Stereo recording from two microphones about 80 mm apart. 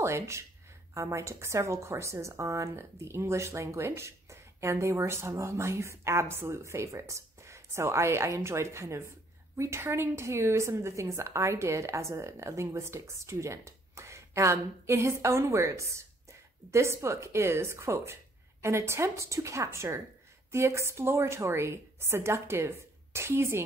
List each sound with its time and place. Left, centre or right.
0.0 s a woman's voice: right